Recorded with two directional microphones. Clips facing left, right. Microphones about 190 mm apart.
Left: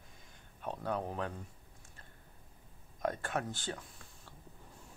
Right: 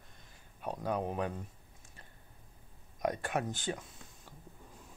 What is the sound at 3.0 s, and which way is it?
Speech, 15° right (ahead or behind).